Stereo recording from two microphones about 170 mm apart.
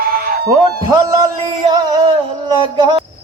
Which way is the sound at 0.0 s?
60° right (ahead or behind).